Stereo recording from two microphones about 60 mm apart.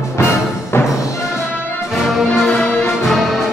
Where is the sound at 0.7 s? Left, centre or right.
Left.